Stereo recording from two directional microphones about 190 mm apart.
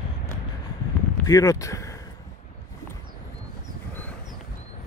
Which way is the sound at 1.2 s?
20° left (ahead or behind).